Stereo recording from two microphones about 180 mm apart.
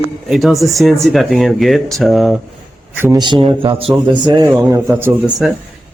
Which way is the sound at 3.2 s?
30° right (ahead or behind).